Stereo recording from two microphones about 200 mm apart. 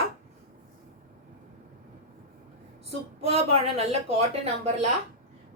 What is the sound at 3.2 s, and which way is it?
Speech, 30° right (ahead or behind).